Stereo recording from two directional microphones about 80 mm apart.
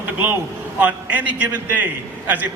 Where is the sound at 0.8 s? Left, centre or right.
Right.